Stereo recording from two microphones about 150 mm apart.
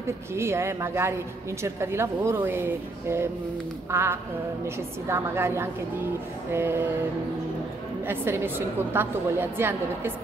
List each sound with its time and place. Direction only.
0.0 s a woman's voice: 15° right (ahead or behind)
8.1 s a woman's voice: 15° right (ahead or behind)